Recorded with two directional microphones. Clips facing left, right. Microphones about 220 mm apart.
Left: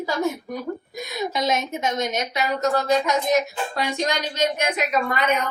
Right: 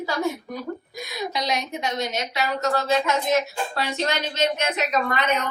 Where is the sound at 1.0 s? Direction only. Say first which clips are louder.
Left 4 dB; 20° left (ahead or behind).